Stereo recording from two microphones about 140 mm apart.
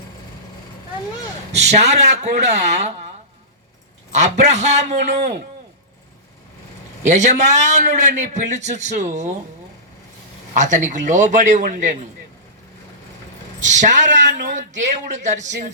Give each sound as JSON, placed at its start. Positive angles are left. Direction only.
{"t": 1.5, "sound": "speech", "side_deg": -50}
{"t": 4.1, "sound": "a man's voice", "side_deg": -55}
{"t": 7.0, "sound": "a man's voice", "side_deg": -55}
{"t": 10.5, "sound": "a man's voice", "side_deg": -60}
{"t": 13.6, "sound": "a man's voice", "side_deg": -60}